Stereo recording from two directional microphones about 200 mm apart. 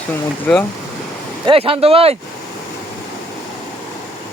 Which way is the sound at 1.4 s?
25° right (ahead or behind).